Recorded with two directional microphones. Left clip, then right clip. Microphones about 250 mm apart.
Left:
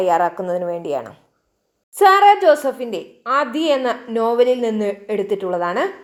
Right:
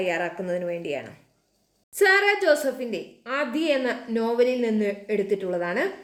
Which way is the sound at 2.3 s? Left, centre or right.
Centre.